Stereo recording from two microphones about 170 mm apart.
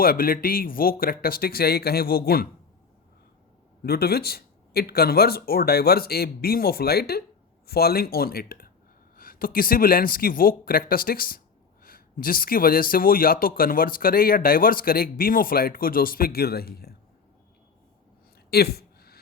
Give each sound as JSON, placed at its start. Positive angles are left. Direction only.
{"t": 0.0, "sound": "speech", "side_deg": 60}
{"t": 3.8, "sound": "speech", "side_deg": 65}
{"t": 18.5, "sound": "a sound", "side_deg": 65}